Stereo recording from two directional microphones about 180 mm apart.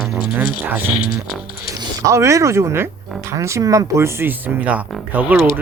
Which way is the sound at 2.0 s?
15° right (ahead or behind).